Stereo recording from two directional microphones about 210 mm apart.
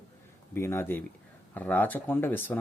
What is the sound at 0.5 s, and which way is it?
Speech, 10° left (ahead or behind).